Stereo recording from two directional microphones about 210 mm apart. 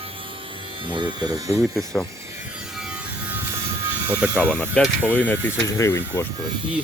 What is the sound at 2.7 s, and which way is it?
Music, 5° right (ahead or behind).